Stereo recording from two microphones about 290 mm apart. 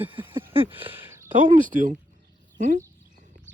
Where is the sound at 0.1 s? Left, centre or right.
Centre.